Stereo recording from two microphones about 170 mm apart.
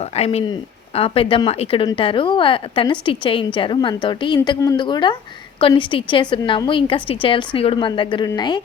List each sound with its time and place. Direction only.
0.0 s a woman's voice: 35° left (ahead or behind)